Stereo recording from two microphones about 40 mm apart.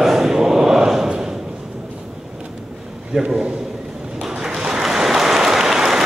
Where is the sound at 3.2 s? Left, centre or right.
Centre.